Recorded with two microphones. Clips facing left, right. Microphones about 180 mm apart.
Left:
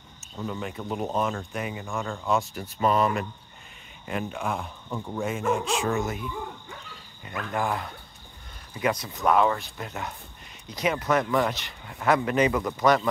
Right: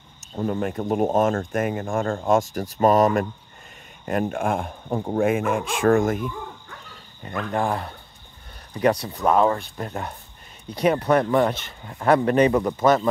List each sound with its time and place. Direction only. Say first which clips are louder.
0.4 s a man's voice: right 8 dB; 50° right (ahead or behind)
7.5 s a man's voice: right 4 dB; 35° right (ahead or behind)
9.0 s a man's voice: right 3 dB; 30° right (ahead or behind)